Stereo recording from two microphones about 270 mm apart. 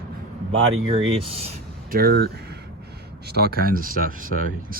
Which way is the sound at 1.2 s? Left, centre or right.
Right.